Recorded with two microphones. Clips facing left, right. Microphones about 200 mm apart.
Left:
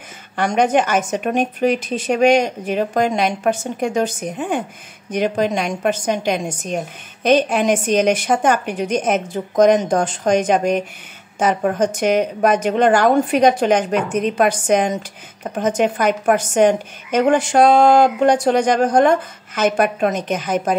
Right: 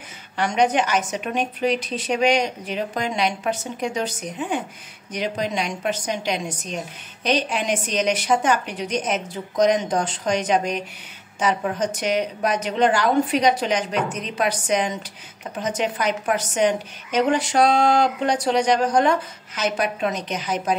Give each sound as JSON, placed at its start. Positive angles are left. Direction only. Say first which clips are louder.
{"t": 0.4, "sound": "a woman's voice", "louder": "left 4 dB", "side_deg": 45}